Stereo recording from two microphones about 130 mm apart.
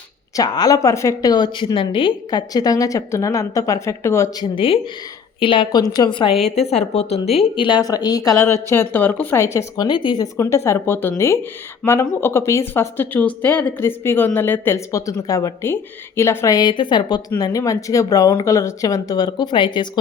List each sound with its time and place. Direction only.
0.3 s speech: 30° left (ahead or behind)
4.5 s a woman's voice: 45° left (ahead or behind)
6.6 s a woman's voice: 55° left (ahead or behind); by 8.4 s 30° left (ahead or behind)
8.7 s speech: 15° left (ahead or behind); by 10.4 s 30° left (ahead or behind)
10.4 s speech: 20° left (ahead or behind); by 19.9 s 40° left (ahead or behind)